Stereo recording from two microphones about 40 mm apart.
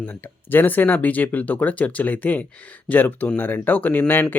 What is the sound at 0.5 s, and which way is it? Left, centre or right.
Speech, left.